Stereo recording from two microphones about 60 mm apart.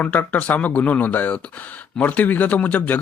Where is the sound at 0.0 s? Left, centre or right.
Left.